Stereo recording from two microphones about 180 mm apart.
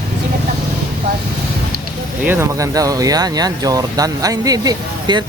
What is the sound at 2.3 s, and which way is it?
Speech, 15° right (ahead or behind).